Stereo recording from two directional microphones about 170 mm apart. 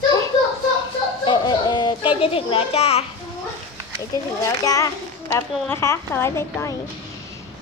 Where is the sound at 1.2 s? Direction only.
25° left (ahead or behind).